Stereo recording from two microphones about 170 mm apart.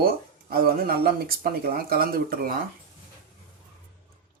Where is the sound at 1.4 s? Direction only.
60° right (ahead or behind).